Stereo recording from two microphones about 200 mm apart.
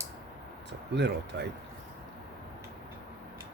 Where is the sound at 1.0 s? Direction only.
60° right (ahead or behind).